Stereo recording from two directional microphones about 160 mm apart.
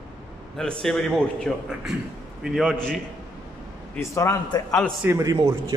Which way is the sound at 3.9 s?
20° left (ahead or behind).